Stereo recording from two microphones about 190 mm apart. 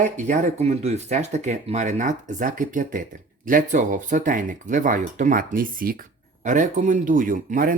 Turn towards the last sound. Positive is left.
turn(degrees=-45)  # may be behind; listen again after turning